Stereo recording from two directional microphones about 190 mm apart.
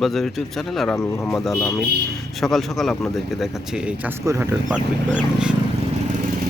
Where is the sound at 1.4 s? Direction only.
Centre (ahead or behind); by 4.5 s 15° right (ahead or behind).